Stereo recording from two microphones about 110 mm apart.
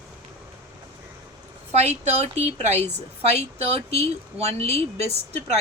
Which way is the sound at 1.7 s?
80° right.